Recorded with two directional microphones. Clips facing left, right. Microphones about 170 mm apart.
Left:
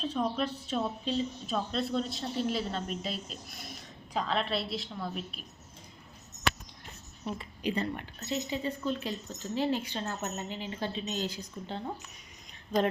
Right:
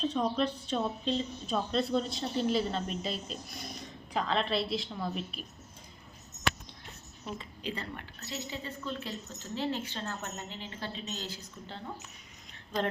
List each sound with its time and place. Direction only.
0.0 s a woman's voice: 5° left (ahead or behind)
7.3 s a woman's voice: 10° left (ahead or behind)